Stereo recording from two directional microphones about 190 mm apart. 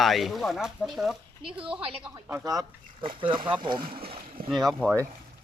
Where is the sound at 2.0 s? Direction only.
10° right (ahead or behind).